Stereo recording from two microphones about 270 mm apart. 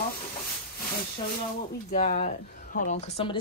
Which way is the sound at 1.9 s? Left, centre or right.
Left.